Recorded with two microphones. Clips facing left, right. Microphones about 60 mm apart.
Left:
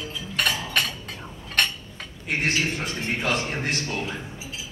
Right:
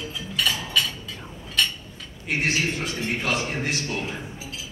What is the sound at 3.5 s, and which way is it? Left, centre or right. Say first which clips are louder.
Speech: even; left.